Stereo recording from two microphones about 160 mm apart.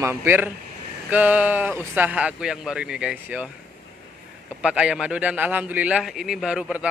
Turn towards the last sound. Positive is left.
turn(degrees=-5)  # may be behind; listen again after turning